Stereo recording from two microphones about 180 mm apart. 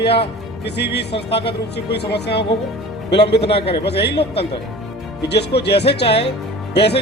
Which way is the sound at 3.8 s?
65° left (ahead or behind).